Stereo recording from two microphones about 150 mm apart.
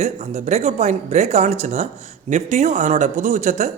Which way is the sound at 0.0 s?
50° right (ahead or behind).